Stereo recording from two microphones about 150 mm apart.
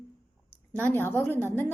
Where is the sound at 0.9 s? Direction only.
15° left (ahead or behind).